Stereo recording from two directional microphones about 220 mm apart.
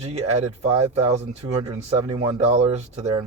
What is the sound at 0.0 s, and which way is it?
Speech, 30° right (ahead or behind).